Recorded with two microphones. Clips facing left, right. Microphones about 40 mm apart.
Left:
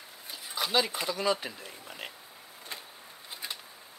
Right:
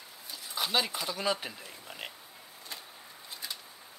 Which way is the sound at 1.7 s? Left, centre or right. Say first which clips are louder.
Left 1 dB; centre.